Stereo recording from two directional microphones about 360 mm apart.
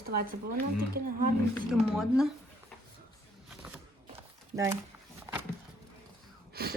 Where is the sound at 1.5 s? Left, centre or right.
Centre.